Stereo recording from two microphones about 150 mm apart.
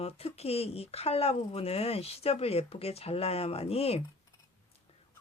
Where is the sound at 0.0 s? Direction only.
40° left (ahead or behind).